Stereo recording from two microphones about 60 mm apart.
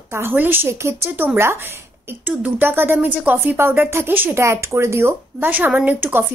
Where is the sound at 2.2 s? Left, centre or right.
Right.